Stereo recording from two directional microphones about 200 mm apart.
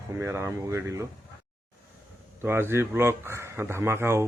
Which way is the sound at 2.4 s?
10° right (ahead or behind).